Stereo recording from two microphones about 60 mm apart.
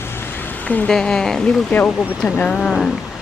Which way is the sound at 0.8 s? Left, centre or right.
Centre.